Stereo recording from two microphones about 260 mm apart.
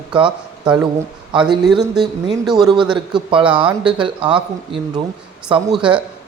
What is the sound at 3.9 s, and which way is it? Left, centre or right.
Speech, centre.